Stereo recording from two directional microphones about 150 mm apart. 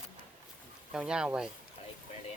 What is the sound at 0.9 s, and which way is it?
Speech, 5° right (ahead or behind).